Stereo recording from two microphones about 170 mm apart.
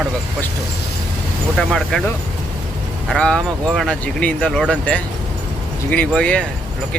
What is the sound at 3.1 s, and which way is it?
Speech, 5° left (ahead or behind).